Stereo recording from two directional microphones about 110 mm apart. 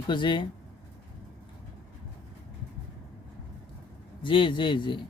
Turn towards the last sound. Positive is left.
turn(degrees=45)  # may be behind; listen again after turning